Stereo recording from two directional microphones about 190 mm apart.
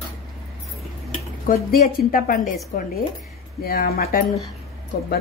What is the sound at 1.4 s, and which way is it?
Speech, 50° left (ahead or behind).